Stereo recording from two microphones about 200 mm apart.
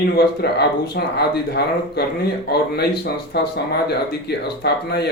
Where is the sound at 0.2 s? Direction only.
55° left (ahead or behind).